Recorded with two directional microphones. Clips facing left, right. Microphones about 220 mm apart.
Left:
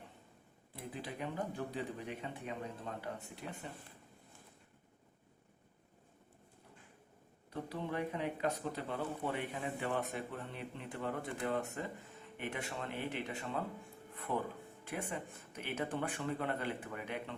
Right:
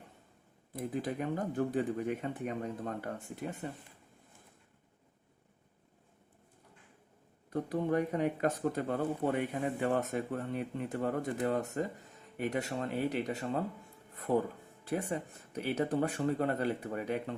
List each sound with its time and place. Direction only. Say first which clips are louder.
0.7 s speech: right 9 dB; 45° right (ahead or behind)
7.5 s speech: right 9 dB; 50° right (ahead or behind)
14.1 s music: right 7 dB; 40° right (ahead or behind)
14.8 s speech: right 7 dB; 35° right (ahead or behind)